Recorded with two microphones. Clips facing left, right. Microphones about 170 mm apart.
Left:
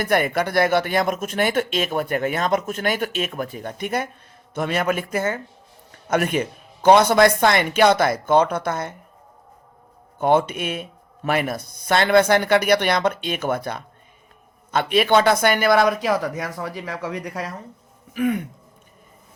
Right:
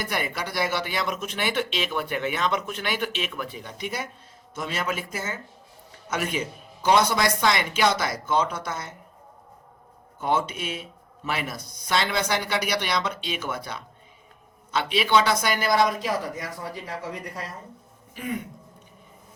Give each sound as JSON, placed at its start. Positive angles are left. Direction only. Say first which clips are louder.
{"t": 0.0, "sound": "speech", "louder": "left 9 dB", "side_deg": 55}
{"t": 10.2, "sound": "speech", "louder": "left 7 dB", "side_deg": 60}